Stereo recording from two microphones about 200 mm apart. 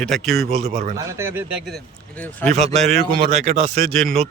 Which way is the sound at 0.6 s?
30° right (ahead or behind).